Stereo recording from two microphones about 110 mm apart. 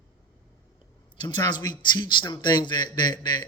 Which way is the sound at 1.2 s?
40° left (ahead or behind).